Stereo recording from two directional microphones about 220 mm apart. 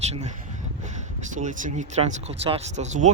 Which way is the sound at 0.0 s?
30° right (ahead or behind).